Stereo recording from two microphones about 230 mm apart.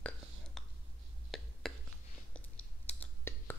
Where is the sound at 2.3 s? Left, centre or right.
Centre.